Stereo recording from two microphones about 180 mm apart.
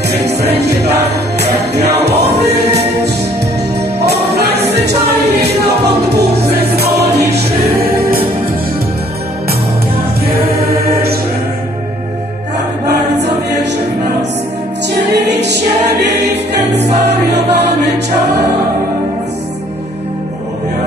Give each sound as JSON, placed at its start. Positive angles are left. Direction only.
{"t": 0.8, "sound": "music", "side_deg": -65}
{"t": 4.0, "sound": "music", "side_deg": -65}
{"t": 10.7, "sound": "music", "side_deg": -60}
{"t": 15.0, "sound": "choir", "side_deg": -70}
{"t": 17.4, "sound": "music", "side_deg": -70}